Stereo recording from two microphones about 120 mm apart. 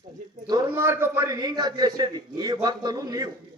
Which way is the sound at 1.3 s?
35° right (ahead or behind).